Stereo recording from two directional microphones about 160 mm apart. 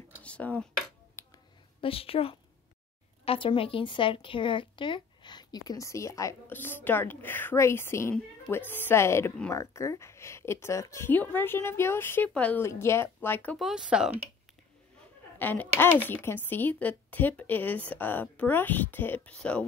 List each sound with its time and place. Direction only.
0.2 s a sound: 10° left (ahead or behind)
1.2 s finger snapping: 15° left (ahead or behind)
1.8 s a woman's voice: 35° left (ahead or behind); by 13.6 s 10° left (ahead or behind)
13.6 s speech: centre (ahead or behind)
15.3 s a woman's voice: 10° left (ahead or behind)